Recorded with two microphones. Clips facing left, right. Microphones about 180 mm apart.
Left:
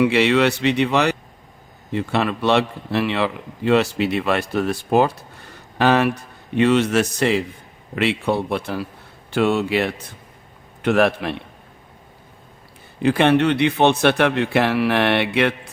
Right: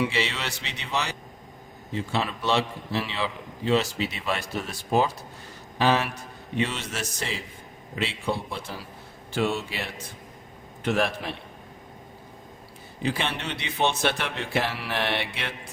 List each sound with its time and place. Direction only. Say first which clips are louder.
0.0 s a man's voice: left 12 dB; 60° left (ahead or behind)
13.0 s a man's voice: left 13 dB; 60° left (ahead or behind)